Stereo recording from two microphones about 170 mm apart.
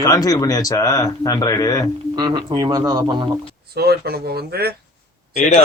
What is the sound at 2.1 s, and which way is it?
Speech, 25° right (ahead or behind).